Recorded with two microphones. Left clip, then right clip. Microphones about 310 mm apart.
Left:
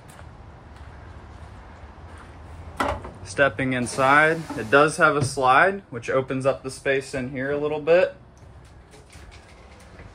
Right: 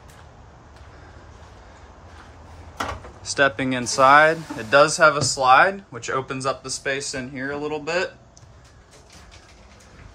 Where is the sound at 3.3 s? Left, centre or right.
Centre.